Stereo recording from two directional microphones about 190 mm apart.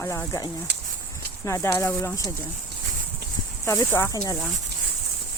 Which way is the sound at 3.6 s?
15° left (ahead or behind).